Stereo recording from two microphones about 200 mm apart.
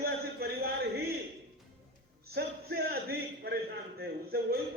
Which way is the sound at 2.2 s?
50° right (ahead or behind).